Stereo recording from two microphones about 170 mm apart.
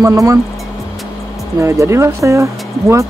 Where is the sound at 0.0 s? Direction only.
20° right (ahead or behind).